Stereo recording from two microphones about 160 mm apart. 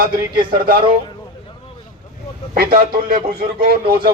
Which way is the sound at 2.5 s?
65° right (ahead or behind).